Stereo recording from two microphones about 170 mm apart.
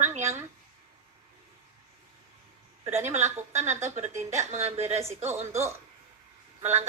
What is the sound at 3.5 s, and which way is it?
A woman's voice, 40° right (ahead or behind).